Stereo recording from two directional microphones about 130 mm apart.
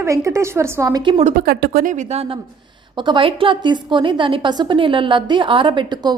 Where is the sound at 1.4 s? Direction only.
90° right; by 2.3 s 55° right (ahead or behind).